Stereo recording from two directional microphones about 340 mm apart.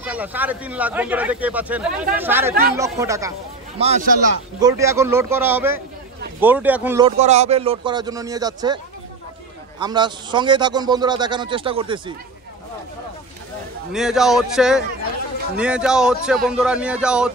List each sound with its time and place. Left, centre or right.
0.0 s a man's voice: centre
3.8 s a man's voice: right
4.6 s a man's voice: centre
9.8 s a man's voice: centre
13.9 s speech: centre